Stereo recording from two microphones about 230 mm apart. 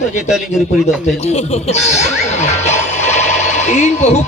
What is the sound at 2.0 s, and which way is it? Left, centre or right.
Music, left.